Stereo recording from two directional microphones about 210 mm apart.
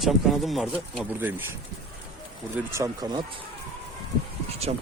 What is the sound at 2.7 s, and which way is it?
Speech, 15° right (ahead or behind).